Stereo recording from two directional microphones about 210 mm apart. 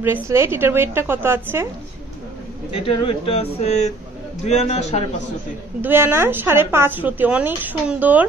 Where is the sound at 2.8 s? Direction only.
25° left (ahead or behind).